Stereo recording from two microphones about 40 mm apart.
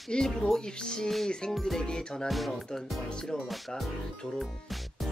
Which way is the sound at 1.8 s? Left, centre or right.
Left.